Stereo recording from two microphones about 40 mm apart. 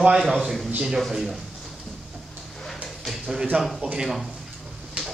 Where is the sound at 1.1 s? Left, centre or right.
Centre.